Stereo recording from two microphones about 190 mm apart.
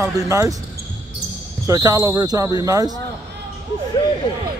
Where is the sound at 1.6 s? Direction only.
15° right (ahead or behind).